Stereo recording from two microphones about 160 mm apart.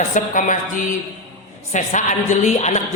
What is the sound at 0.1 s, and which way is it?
Speech, 50° left (ahead or behind).